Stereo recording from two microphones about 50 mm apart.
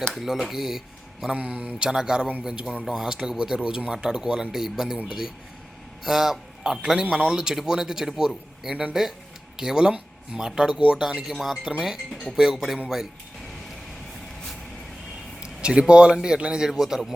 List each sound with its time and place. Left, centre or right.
0.1 s speech: centre
1.3 s speech: right; by 12.8 s centre
13.4 s vehicle: centre
15.6 s speech: centre